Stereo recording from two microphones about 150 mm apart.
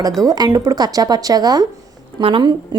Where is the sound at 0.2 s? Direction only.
25° right (ahead or behind).